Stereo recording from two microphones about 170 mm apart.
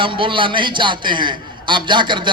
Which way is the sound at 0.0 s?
30° right (ahead or behind).